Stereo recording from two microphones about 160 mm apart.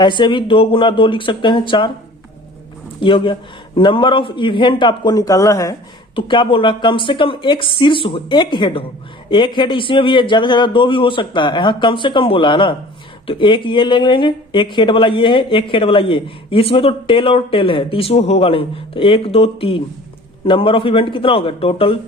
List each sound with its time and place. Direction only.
0.0 s speech: 30° left (ahead or behind)
3.0 s a man's voice: 30° left (ahead or behind)